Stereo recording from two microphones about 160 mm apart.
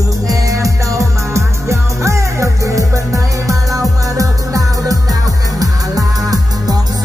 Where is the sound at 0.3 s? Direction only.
20° right (ahead or behind).